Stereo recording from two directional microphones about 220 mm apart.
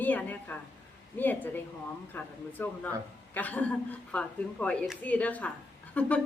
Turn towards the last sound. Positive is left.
turn(degrees=5)  # may be behind; listen again after turning